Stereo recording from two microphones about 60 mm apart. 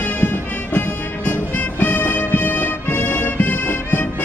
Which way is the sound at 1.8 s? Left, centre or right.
Left.